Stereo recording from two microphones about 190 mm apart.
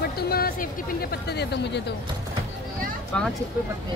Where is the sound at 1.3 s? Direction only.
65° left (ahead or behind).